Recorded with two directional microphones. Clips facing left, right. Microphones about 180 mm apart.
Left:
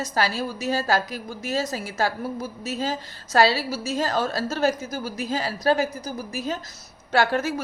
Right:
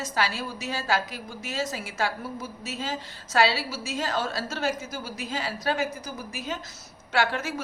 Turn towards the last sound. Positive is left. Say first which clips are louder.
# left 5 dB
turn(degrees=40)  # may be behind; listen again after turning